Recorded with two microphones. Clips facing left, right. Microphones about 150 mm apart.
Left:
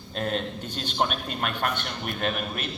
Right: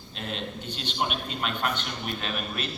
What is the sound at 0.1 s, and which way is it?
A man's voice, 45° left (ahead or behind).